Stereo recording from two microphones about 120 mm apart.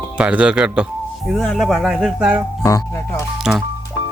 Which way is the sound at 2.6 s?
30° left (ahead or behind).